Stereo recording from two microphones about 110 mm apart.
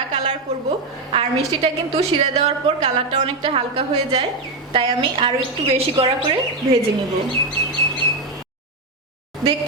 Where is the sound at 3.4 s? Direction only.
50° right (ahead or behind).